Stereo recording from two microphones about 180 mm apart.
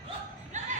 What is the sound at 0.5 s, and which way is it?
Music, 40° right (ahead or behind).